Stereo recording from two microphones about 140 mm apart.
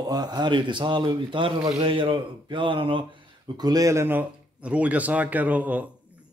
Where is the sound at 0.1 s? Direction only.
30° right (ahead or behind).